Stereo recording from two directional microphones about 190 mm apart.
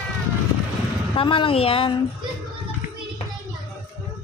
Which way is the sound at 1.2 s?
25° left (ahead or behind).